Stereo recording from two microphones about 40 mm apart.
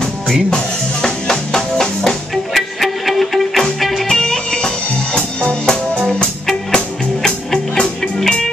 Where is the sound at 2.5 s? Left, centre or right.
Centre.